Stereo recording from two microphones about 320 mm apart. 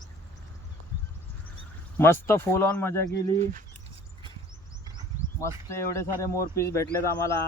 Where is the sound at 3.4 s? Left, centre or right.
Right.